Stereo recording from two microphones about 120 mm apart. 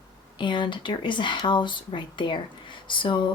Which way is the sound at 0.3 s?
40° left (ahead or behind).